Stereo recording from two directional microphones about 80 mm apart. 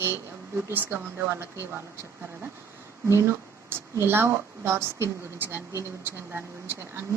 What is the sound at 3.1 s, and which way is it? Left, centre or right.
Speech, right.